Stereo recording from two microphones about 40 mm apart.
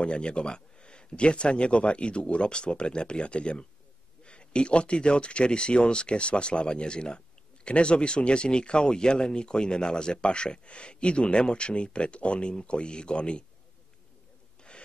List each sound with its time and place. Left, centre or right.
0.0 s speech: left